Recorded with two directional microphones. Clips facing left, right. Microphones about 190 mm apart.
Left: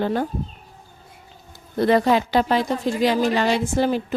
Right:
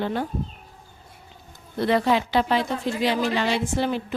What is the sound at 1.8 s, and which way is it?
Speech, 45° left (ahead or behind).